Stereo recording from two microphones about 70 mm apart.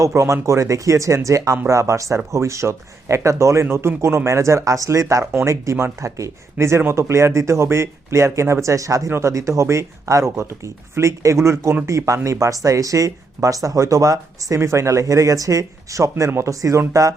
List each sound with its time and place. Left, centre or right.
0.0 s speech: right